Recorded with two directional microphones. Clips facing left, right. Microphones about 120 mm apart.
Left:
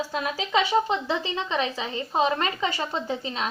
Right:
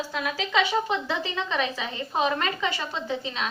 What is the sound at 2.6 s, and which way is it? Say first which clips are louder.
Speech: left 2 dB; 40° left (ahead or behind).